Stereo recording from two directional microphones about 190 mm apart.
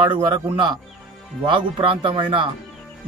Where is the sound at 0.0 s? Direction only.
25° right (ahead or behind).